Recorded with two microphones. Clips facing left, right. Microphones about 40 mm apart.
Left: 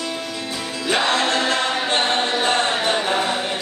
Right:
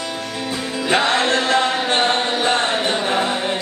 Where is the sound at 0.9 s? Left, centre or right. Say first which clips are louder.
Right 2 dB; right.